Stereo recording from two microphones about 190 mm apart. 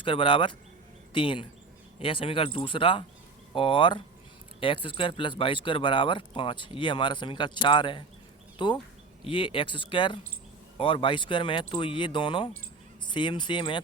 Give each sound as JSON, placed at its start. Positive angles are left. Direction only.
{"t": 0.0, "sound": "speech", "side_deg": 25}